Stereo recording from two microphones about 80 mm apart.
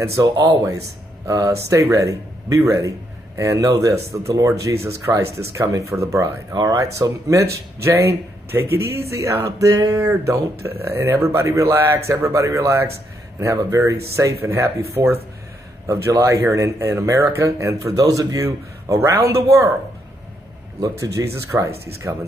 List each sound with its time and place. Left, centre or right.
0.0 s speech: right
6.5 s speech: right
20.8 s speech: right